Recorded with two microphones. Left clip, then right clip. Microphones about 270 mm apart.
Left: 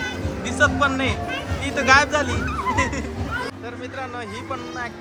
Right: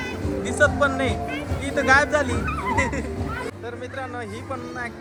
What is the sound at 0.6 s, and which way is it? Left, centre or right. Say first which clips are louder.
Speech: left 1 dB; centre.